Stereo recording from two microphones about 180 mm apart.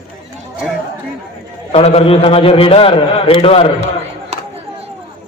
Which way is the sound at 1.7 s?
30° left (ahead or behind).